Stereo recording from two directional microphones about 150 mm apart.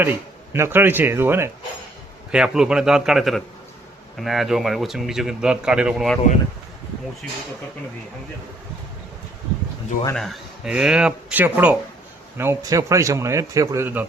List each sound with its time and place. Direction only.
0.0 s speech: 15° right (ahead or behind)
2.3 s a man's voice: 5° right (ahead or behind)
10.2 s a man's voice: centre (ahead or behind)